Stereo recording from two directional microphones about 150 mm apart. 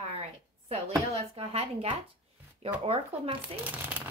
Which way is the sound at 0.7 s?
45° right (ahead or behind).